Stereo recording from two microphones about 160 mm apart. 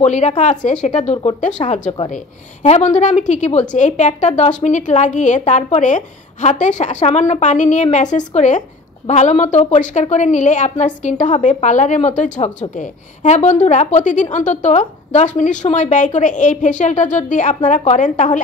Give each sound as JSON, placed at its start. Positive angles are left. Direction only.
{"t": 0.0, "sound": "a woman's voice", "side_deg": 45}